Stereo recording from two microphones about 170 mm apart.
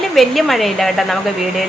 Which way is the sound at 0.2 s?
Centre (ahead or behind).